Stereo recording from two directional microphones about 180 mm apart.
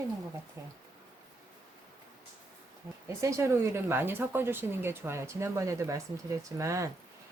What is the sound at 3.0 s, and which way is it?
Speech, 15° right (ahead or behind).